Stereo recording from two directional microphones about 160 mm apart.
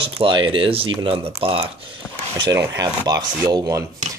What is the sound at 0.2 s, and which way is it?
Speech, 30° right (ahead or behind).